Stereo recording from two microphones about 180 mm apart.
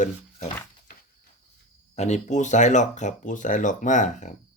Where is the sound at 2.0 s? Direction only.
40° left (ahead or behind).